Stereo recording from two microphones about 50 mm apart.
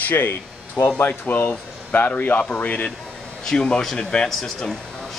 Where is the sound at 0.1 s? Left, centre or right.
Left.